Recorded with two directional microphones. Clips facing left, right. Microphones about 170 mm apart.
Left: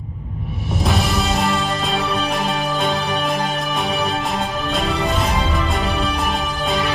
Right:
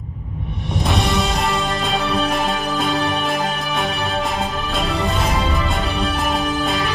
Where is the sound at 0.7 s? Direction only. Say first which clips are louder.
Even; centre (ahead or behind).